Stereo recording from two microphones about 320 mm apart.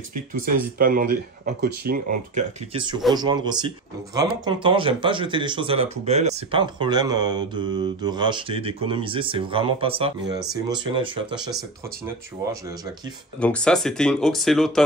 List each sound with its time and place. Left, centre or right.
0.3 s speech: right
13.4 s speech: centre